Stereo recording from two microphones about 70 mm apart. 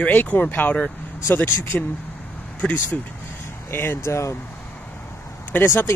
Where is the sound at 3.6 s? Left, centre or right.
Left.